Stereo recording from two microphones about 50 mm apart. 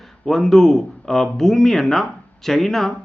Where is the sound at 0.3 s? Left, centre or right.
Centre.